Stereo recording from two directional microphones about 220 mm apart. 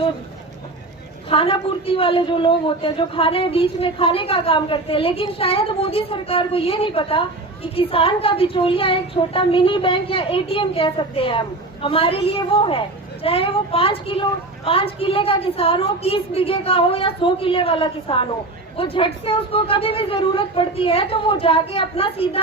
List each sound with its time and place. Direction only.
1.3 s a woman's voice: 25° left (ahead or behind)